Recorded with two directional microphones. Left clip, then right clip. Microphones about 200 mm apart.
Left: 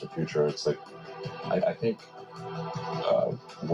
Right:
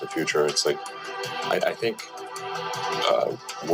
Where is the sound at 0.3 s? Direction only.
25° right (ahead or behind).